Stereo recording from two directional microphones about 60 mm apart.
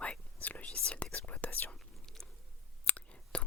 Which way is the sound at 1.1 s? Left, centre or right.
Left.